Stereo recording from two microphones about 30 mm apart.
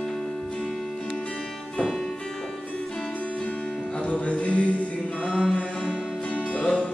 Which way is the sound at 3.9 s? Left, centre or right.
Left.